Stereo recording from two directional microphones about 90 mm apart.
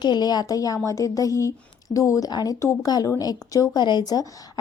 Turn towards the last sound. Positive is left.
turn(degrees=45)  # may be behind; listen again after turning